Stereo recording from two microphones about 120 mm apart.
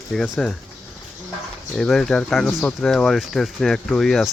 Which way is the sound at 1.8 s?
5° left (ahead or behind).